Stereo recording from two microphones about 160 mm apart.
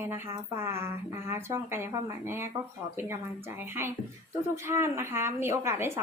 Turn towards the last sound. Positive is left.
turn(degrees=-15)  # may be behind; listen again after turning